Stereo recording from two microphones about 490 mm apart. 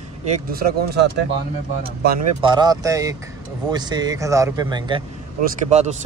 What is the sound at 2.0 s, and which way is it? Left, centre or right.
Speech, centre.